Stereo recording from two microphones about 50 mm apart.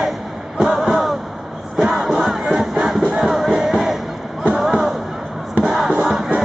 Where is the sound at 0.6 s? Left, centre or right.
Centre.